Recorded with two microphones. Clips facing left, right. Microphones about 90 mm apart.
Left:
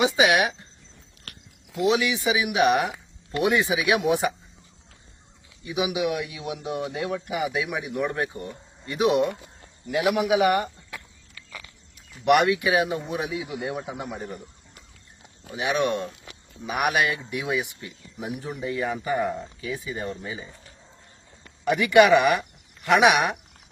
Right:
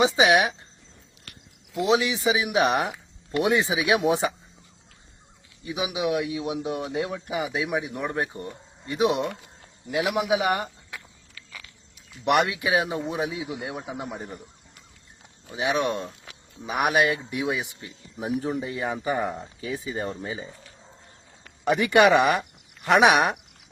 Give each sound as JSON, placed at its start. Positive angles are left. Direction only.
{"t": 0.0, "sound": "speech", "side_deg": -30}
{"t": 1.9, "sound": "speech", "side_deg": -30}
{"t": 5.6, "sound": "speech", "side_deg": -30}
{"t": 9.0, "sound": "speech", "side_deg": 5}
{"t": 10.2, "sound": "speech", "side_deg": -20}
{"t": 12.2, "sound": "speech", "side_deg": -30}
{"t": 15.5, "sound": "speech", "side_deg": -25}
{"t": 21.6, "sound": "speech", "side_deg": -30}